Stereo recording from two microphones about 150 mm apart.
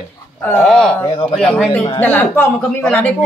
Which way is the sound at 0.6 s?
Centre (ahead or behind).